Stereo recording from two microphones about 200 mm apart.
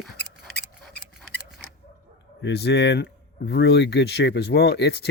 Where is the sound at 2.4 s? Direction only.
55° left (ahead or behind).